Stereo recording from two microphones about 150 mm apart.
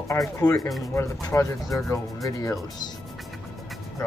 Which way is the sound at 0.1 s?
20° left (ahead or behind).